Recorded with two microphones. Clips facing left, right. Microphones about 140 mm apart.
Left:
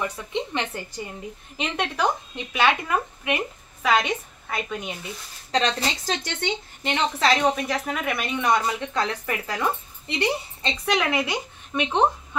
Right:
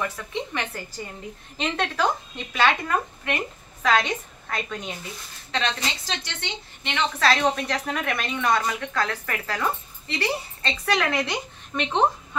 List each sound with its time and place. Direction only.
0.0 s a woman's voice: 20° left (ahead or behind)
1.6 s a woman's voice: 15° left (ahead or behind)
5.5 s a woman's voice: 40° left (ahead or behind)
7.2 s a woman's voice: 15° left (ahead or behind)